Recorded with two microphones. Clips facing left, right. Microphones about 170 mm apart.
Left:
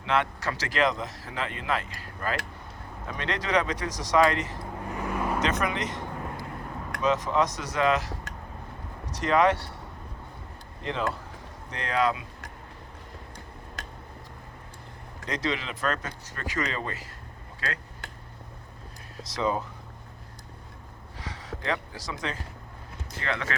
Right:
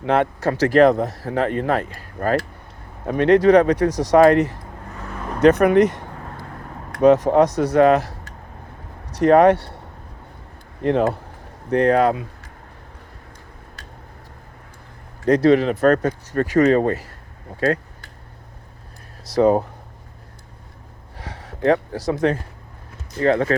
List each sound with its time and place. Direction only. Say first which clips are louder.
0.0 s speech: right 9 dB; 50° right (ahead or behind)
4.9 s vehicle: left 2 dB; 10° left (ahead or behind)
5.4 s speech: right 15 dB; 60° right (ahead or behind)
9.1 s speech: right 10 dB; 60° right (ahead or behind)
10.8 s speech: right 12 dB; 55° right (ahead or behind)
15.3 s speech: right 16 dB; 60° right (ahead or behind)
19.2 s speech: right 12 dB; 60° right (ahead or behind)
21.2 s a sound: right 10 dB; 60° right (ahead or behind)
23.2 s speech: right 14 dB; 45° right (ahead or behind)